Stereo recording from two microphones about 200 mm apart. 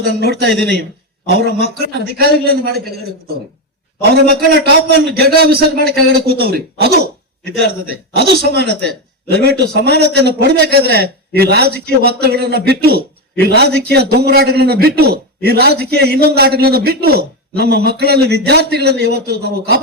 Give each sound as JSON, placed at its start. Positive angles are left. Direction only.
{"t": 0.2, "sound": "speech", "side_deg": -55}
{"t": 2.1, "sound": "a man's voice", "side_deg": -50}
{"t": 4.1, "sound": "a man's voice", "side_deg": -55}
{"t": 8.4, "sound": "a man's voice", "side_deg": -55}